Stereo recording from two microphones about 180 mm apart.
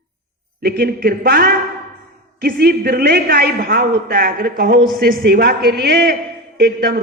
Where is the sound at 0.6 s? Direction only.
55° right (ahead or behind).